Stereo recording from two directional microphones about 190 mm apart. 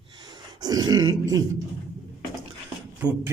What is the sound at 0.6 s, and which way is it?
Grunt, 20° right (ahead or behind).